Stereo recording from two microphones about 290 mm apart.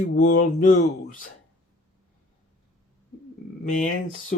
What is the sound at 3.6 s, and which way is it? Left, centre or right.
Speech, left.